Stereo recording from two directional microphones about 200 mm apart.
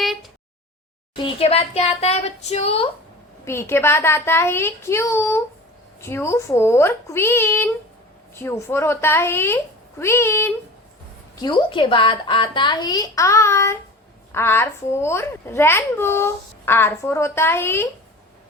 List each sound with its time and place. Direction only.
0.0 s a sound: centre (ahead or behind)
1.1 s a woman's voice: 25° left (ahead or behind)
3.4 s a child's voice: 10° left (ahead or behind)